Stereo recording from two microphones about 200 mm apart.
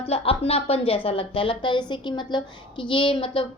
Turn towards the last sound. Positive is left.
turn(degrees=25)  # may be behind; listen again after turning